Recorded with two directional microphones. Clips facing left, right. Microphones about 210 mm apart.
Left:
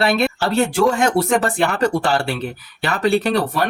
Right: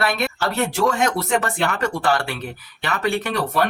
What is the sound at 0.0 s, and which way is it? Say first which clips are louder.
Speech: left 5 dB; 30° left (ahead or behind).